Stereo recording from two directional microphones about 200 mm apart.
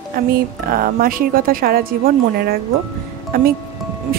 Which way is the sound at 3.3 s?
50° right (ahead or behind).